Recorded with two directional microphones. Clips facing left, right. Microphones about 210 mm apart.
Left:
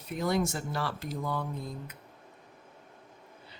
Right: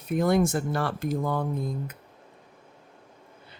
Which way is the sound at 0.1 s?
55° right (ahead or behind).